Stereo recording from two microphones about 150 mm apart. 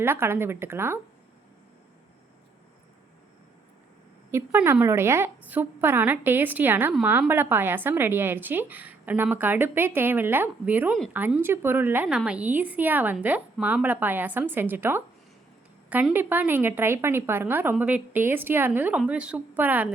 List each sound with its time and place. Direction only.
0.0 s a woman's voice: 15° right (ahead or behind)
4.3 s a woman's voice: 15° right (ahead or behind)